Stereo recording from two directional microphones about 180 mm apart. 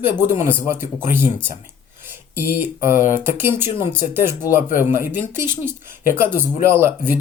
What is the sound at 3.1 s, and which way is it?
Speech, 10° right (ahead or behind).